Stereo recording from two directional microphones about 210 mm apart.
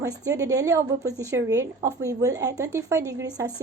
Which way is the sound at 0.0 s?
15° right (ahead or behind).